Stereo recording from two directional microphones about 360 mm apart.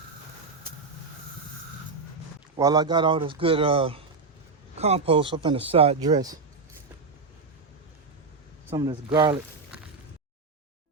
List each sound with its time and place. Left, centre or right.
2.6 s speech: centre
8.7 s speech: centre